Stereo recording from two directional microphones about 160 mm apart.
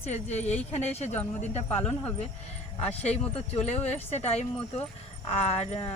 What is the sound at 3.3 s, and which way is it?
Speech, 40° left (ahead or behind).